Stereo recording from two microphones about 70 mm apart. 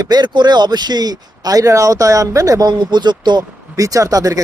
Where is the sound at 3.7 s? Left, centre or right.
Right.